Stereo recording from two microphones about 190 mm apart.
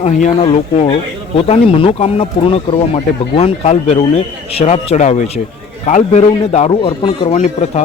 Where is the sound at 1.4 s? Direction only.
30° left (ahead or behind).